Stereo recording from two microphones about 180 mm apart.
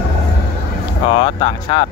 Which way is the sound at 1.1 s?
30° left (ahead or behind).